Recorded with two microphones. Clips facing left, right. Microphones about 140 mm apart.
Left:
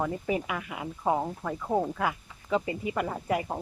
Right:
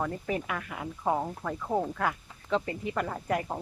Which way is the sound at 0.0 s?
10° left (ahead or behind).